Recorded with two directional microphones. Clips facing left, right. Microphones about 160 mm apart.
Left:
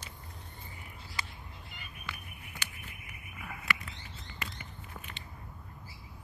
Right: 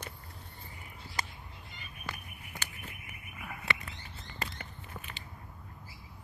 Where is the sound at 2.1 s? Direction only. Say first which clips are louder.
Right 2 dB; 40° right (ahead or behind).